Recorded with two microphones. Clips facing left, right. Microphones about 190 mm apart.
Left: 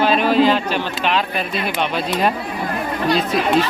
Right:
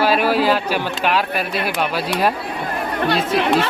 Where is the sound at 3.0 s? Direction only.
60° right (ahead or behind).